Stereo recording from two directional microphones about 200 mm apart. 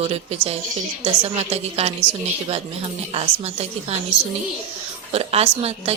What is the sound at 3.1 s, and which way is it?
Speech, 30° right (ahead or behind).